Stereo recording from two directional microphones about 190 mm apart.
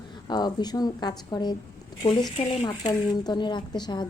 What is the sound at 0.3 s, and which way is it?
A woman's voice, 20° left (ahead or behind).